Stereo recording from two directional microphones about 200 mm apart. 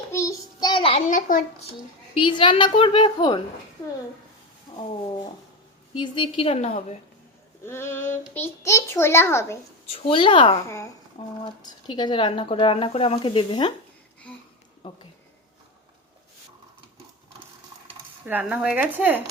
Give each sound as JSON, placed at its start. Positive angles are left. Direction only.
{"t": 0.1, "sound": "child singing", "side_deg": 15}
{"t": 1.0, "sound": "a woman's voice", "side_deg": 40}
{"t": 2.1, "sound": "speech", "side_deg": 25}
{"t": 4.7, "sound": "a sound", "side_deg": 20}
{"t": 6.0, "sound": "a woman's voice", "side_deg": 25}
{"t": 7.6, "sound": "a child's voice", "side_deg": 10}
{"t": 9.8, "sound": "speech", "side_deg": 30}
{"t": 14.8, "sound": "speech", "side_deg": 25}
{"t": 18.3, "sound": "speech", "side_deg": -10}